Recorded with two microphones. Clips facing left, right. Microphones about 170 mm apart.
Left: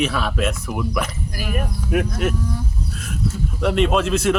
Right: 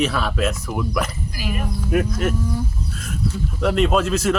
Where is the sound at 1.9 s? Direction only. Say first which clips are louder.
Even; centre (ahead or behind).